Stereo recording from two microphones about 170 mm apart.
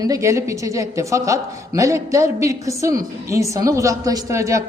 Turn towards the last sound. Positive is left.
turn(degrees=-20)  # may be behind; listen again after turning